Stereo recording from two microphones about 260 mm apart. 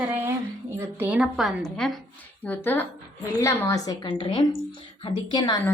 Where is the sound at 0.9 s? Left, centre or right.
Centre.